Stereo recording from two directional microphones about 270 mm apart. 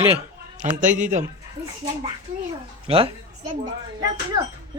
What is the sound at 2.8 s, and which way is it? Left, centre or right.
Speech, centre.